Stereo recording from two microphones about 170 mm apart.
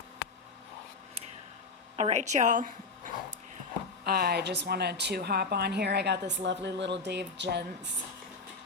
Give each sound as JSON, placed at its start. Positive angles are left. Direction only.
{"t": 2.0, "sound": "a woman's voice", "side_deg": -40}
{"t": 4.0, "sound": "a woman's voice", "side_deg": -70}